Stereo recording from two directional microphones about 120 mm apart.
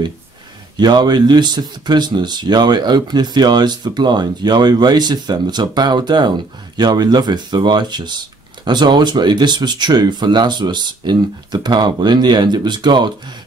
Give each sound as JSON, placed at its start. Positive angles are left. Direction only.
{"t": 0.7, "sound": "speech", "side_deg": -35}